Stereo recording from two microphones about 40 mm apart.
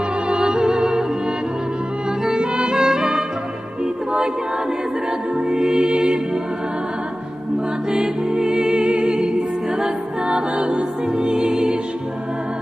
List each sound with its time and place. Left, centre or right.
0.3 s music: centre
2.2 s music: centre
5.5 s music: centre
7.9 s music: centre